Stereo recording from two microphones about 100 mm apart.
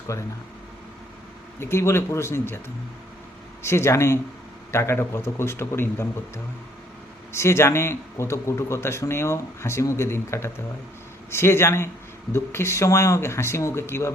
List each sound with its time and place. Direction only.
1.5 s speech: 25° left (ahead or behind)
3.6 s speech: 25° left (ahead or behind)